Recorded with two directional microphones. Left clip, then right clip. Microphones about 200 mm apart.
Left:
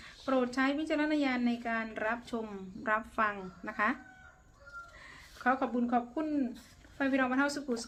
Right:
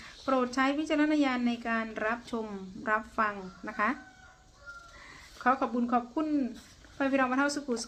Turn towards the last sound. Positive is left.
turn(degrees=-15)  # may be behind; listen again after turning